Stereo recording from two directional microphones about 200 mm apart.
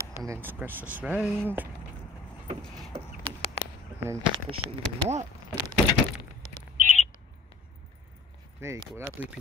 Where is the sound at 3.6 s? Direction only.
30° left (ahead or behind).